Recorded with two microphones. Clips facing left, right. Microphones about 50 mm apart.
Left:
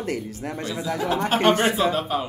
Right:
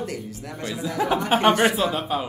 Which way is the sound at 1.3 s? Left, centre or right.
Centre.